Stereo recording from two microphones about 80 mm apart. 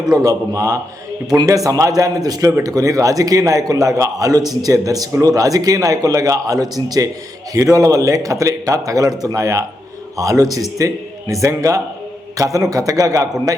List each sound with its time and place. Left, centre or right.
0.1 s a man's voice: right